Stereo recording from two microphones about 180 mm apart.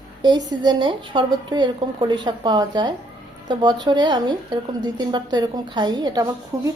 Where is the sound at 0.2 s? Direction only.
25° right (ahead or behind).